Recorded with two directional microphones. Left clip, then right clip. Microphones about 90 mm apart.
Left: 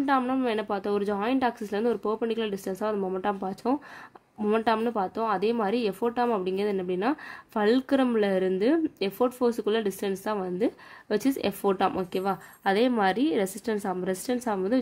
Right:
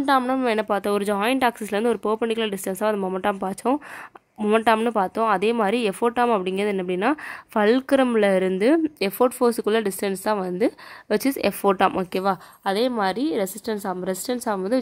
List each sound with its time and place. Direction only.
0.0 s a woman's voice: 30° right (ahead or behind)
2.5 s speech: 35° right (ahead or behind)
3.6 s a woman's voice: 25° right (ahead or behind)
12.6 s a woman's voice: 10° right (ahead or behind)